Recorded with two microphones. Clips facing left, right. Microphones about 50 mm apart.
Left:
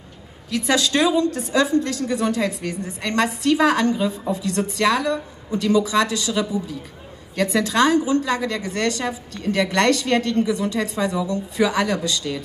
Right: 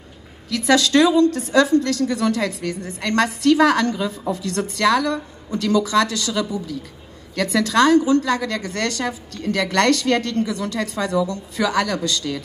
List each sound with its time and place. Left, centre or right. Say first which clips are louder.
0.5 s a woman's voice: right 3 dB; left